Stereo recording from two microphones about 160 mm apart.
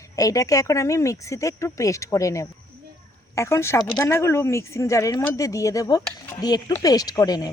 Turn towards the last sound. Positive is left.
turn(degrees=25)  # may be behind; listen again after turning